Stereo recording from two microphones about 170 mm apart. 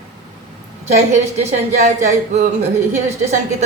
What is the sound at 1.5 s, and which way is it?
Speech, 45° right (ahead or behind).